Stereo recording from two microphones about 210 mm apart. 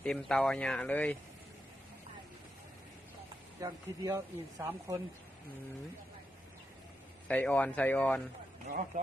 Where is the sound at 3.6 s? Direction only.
15° right (ahead or behind).